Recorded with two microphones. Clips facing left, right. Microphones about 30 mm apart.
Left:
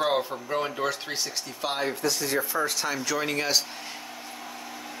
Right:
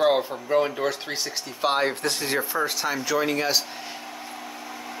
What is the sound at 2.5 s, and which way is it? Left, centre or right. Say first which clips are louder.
A man's voice: right 2 dB; centre.